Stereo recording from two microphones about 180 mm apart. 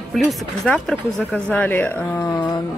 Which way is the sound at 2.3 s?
20° left (ahead or behind).